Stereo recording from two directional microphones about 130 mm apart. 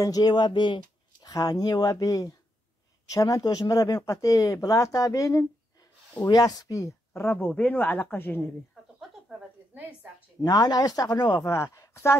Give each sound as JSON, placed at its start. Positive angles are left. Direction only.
{"t": 0.0, "sound": "speech", "side_deg": 30}
{"t": 10.4, "sound": "speech", "side_deg": 30}